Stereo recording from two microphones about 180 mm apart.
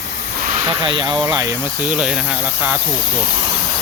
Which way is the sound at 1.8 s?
5° right (ahead or behind).